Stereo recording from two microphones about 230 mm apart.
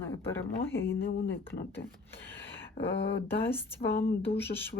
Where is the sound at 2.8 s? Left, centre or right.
Left.